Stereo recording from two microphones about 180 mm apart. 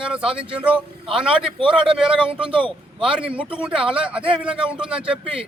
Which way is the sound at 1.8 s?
5° right (ahead or behind).